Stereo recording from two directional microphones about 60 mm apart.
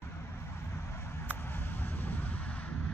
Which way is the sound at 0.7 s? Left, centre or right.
Left.